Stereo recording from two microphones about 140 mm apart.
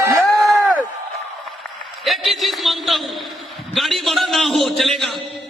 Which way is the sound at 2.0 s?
Centre (ahead or behind).